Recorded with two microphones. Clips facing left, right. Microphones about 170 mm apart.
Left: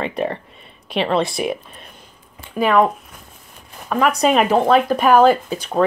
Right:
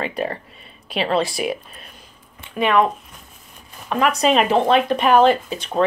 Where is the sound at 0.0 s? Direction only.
25° left (ahead or behind).